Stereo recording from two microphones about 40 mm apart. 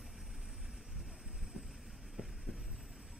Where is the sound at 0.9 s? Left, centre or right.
Centre.